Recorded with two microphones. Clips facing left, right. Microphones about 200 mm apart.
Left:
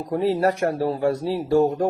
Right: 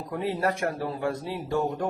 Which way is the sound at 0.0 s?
35° left (ahead or behind).